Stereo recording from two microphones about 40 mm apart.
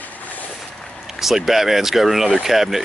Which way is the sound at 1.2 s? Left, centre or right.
Centre.